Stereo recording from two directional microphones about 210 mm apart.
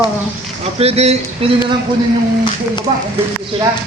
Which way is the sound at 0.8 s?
30° right (ahead or behind).